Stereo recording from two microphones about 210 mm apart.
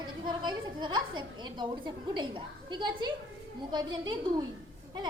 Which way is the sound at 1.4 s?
20° right (ahead or behind).